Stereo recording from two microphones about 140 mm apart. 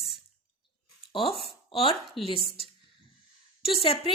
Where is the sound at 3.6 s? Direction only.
40° left (ahead or behind).